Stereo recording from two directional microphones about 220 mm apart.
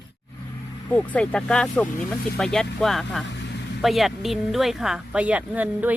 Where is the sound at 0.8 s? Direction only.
5° left (ahead or behind).